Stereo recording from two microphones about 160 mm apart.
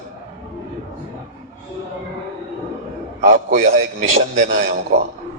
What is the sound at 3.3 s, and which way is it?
Speech, 50° right (ahead or behind).